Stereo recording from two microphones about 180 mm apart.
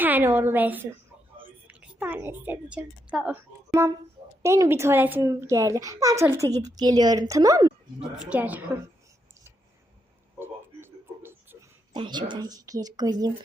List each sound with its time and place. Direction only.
0.0 s a child's voice: 10° right (ahead or behind)
4.4 s a child's voice: 15° right (ahead or behind)
8.0 s a child's voice: 5° right (ahead or behind)
10.4 s a sound: 10° right (ahead or behind)
11.9 s speech: 25° right (ahead or behind)